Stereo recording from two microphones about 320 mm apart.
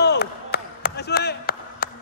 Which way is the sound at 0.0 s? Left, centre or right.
Left.